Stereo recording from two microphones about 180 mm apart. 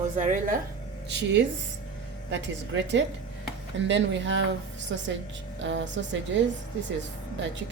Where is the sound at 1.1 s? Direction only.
85° right.